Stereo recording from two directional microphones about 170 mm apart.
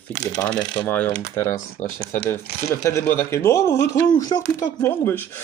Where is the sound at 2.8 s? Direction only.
15° left (ahead or behind).